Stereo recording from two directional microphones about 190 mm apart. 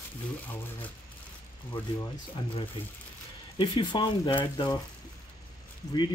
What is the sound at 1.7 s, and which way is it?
Speech, 25° left (ahead or behind).